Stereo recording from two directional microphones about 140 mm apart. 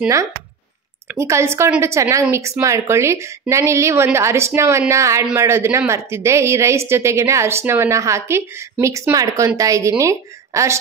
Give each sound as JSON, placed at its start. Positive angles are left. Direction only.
{"t": 1.0, "sound": "speech", "side_deg": -20}